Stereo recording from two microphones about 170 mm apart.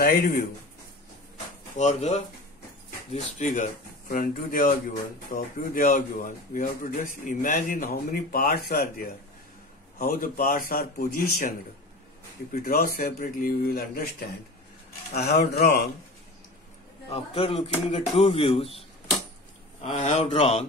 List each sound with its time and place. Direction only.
0.0 s speech: 55° left (ahead or behind)
1.8 s speech: 40° left (ahead or behind)
12.6 s speech: 60° left (ahead or behind)
17.1 s speech: 35° left (ahead or behind)
19.8 s speech: 40° left (ahead or behind)